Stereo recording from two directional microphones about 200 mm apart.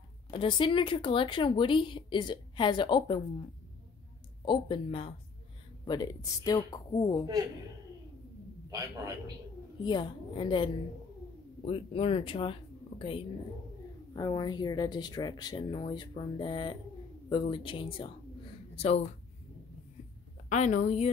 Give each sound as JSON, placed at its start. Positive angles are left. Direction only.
{"t": 0.3, "sound": "speech", "side_deg": 25}
{"t": 4.5, "sound": "speech", "side_deg": 25}
{"t": 8.6, "sound": "a man's voice", "side_deg": -15}
{"t": 9.8, "sound": "a woman's voice", "side_deg": 20}
{"t": 20.4, "sound": "a woman's voice", "side_deg": 35}